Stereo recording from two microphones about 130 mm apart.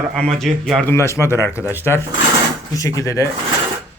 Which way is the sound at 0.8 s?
20° left (ahead or behind).